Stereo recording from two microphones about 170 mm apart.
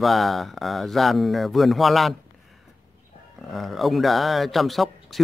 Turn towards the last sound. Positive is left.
turn(degrees=0)  # may be behind; listen again after turning